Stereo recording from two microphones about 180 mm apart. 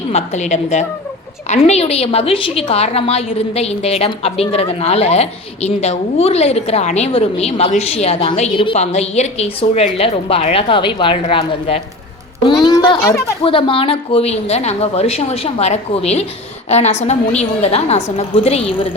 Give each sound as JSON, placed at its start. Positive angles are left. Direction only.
{"t": 0.1, "sound": "a woman's voice", "side_deg": 40}